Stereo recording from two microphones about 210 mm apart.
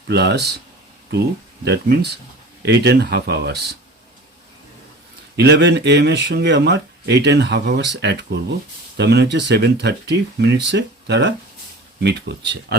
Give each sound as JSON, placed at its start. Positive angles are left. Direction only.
{"t": 0.1, "sound": "speech", "side_deg": -55}
{"t": 1.6, "sound": "speech", "side_deg": -50}
{"t": 5.4, "sound": "speech", "side_deg": -55}